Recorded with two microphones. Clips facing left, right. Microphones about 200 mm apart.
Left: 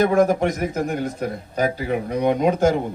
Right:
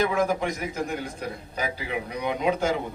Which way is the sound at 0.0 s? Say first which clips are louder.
Left 7 dB; 50° left (ahead or behind).